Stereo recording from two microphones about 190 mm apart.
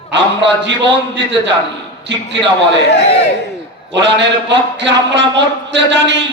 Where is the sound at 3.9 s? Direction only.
70° right (ahead or behind).